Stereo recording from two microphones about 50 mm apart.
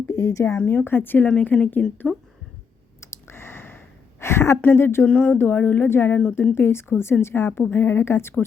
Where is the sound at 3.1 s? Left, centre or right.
Left.